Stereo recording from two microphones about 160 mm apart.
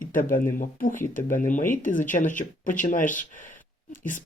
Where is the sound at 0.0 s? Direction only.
60° left (ahead or behind).